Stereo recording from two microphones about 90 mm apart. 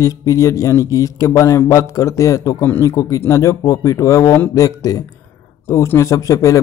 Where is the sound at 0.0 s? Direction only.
35° left (ahead or behind).